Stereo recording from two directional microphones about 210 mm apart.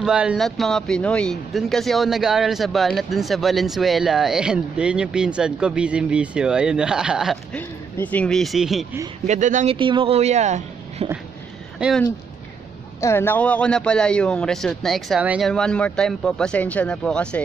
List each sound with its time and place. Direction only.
0.0 s speech: 5° right (ahead or behind)
9.2 s speech: 35° right (ahead or behind)
9.8 s speech: 25° right (ahead or behind)
11.8 s speech: centre (ahead or behind)